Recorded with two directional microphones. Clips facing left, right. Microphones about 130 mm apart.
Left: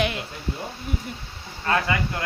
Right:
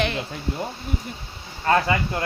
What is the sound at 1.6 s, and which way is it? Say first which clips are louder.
Speech: right 4 dB; 30° right (ahead or behind).